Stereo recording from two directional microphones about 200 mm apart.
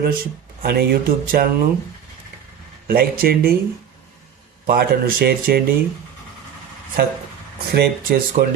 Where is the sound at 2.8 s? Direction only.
50° right (ahead or behind).